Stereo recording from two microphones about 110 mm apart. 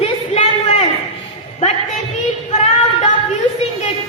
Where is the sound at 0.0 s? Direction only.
85° left.